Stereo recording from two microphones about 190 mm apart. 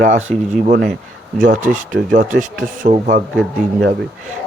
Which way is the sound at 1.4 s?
40° right (ahead or behind).